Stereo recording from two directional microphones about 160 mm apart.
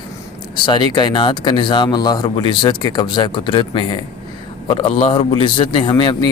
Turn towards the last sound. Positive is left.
turn(degrees=30)  # may be behind; listen again after turning